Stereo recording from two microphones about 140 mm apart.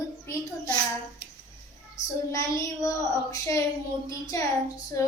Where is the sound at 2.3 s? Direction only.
20° left (ahead or behind).